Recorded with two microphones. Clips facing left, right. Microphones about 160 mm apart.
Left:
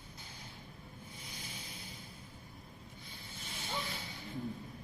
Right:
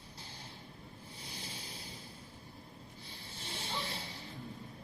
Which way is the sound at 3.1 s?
30° right (ahead or behind).